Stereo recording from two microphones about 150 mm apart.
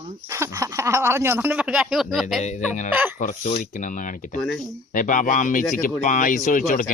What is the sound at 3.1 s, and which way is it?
Speech, 60° left (ahead or behind).